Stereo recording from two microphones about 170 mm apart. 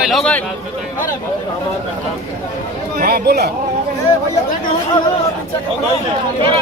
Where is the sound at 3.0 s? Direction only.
60° right (ahead or behind).